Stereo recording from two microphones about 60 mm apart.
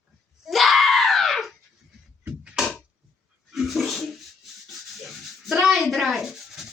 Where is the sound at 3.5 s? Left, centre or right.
Centre.